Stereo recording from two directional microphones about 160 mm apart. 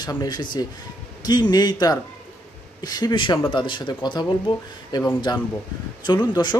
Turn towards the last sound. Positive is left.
turn(degrees=25)  # may be behind; listen again after turning